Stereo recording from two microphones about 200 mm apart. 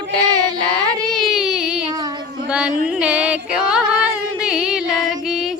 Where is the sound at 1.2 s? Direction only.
Centre (ahead or behind).